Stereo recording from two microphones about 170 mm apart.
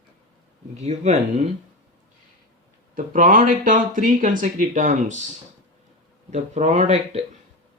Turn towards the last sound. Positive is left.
turn(degrees=-40)  # may be behind; listen again after turning